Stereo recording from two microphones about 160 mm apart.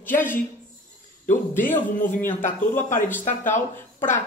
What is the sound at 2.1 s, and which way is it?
Speech, 15° left (ahead or behind).